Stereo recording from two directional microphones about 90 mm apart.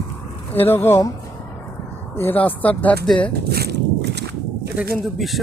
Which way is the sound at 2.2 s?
20° left (ahead or behind).